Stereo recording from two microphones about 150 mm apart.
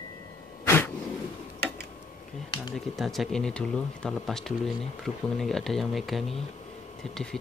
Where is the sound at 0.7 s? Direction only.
15° left (ahead or behind).